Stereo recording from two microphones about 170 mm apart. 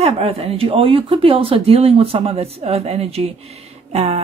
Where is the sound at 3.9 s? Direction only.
35° right (ahead or behind).